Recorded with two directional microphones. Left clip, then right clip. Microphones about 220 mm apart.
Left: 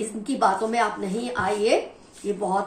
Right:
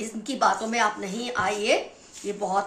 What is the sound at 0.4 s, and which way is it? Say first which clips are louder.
A woman's voice: left 1 dB; 40° right (ahead or behind).